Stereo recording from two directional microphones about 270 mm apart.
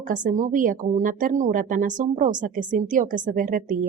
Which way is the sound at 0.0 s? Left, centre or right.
Right.